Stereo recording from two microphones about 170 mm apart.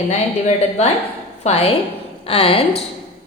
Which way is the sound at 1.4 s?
35° left (ahead or behind).